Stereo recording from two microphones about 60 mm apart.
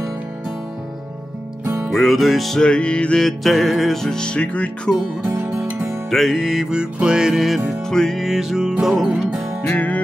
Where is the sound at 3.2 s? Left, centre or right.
Centre.